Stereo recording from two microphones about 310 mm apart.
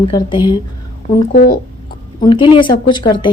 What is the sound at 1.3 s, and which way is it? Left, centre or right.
Speech, left.